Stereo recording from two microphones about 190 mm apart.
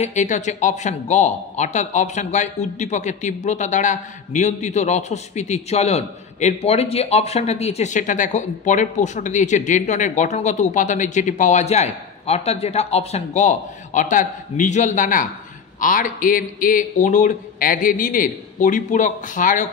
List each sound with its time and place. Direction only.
0.0 s a man's voice: 40° left (ahead or behind)